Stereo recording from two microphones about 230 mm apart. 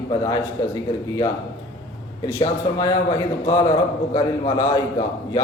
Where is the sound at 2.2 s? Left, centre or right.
Centre.